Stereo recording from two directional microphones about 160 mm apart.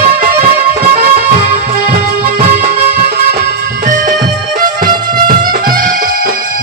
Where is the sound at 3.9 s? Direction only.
55° right (ahead or behind).